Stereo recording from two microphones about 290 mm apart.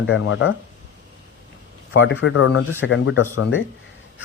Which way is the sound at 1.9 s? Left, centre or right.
Left.